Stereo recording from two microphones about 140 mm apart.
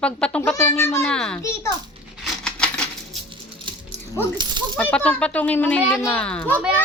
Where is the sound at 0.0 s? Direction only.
10° left (ahead or behind).